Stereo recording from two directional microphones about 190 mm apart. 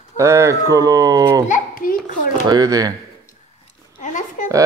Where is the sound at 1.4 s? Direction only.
45° left (ahead or behind).